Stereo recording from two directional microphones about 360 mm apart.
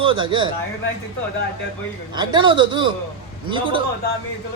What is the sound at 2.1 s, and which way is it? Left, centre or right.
Speech, centre.